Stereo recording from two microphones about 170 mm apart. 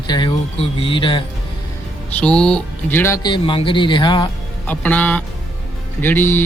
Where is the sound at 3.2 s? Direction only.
25° left (ahead or behind).